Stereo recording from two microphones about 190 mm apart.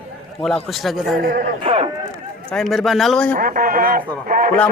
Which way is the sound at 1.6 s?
30° right (ahead or behind).